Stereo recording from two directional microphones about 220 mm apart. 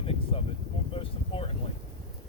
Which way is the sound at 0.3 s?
25° left (ahead or behind).